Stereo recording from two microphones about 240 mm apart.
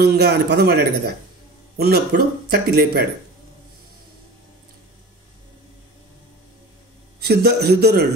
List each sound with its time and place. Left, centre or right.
0.0 s a man's voice: right
7.2 s a man's voice: right